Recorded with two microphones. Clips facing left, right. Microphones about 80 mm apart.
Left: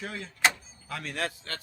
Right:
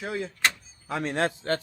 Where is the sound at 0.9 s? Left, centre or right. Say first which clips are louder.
Right 7 dB; right.